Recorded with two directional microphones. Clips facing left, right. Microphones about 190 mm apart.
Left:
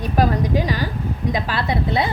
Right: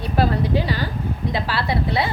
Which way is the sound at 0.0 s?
15° left (ahead or behind).